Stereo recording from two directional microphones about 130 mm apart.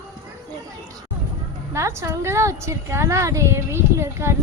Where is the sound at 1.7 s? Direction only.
20° right (ahead or behind).